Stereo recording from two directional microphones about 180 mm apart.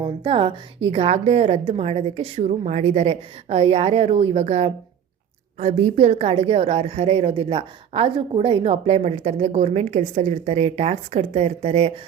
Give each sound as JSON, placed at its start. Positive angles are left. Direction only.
{"t": 0.0, "sound": "a woman's voice", "side_deg": -30}